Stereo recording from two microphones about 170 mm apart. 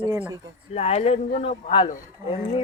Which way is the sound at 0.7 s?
40° left (ahead or behind).